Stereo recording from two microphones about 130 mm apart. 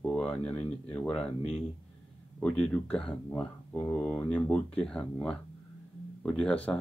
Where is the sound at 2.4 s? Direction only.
10° left (ahead or behind).